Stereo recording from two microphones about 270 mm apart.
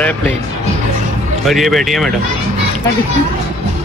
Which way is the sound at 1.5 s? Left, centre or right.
Centre.